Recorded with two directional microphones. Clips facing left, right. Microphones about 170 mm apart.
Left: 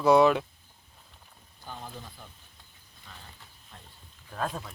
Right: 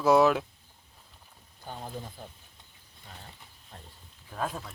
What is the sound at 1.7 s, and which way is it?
Speech, 40° right (ahead or behind).